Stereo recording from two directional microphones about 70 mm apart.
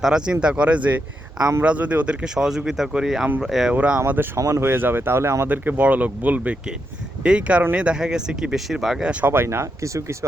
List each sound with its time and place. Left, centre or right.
0.0 s speech: centre
4.4 s speech: right
4.6 s speech: right
5.5 s speech: right; by 9.1 s centre
9.3 s speech: right